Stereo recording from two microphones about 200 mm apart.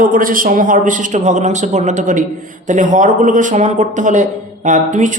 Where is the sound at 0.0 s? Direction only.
45° right (ahead or behind).